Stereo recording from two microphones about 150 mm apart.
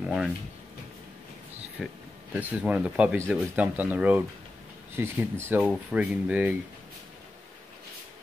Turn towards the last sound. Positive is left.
turn(degrees=-10)  # may be behind; listen again after turning